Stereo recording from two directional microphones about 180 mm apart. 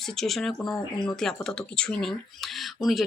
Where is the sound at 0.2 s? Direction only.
Centre (ahead or behind).